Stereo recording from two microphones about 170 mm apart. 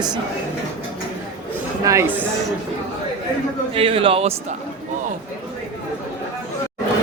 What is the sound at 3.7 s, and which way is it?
Speech, 35° right (ahead or behind).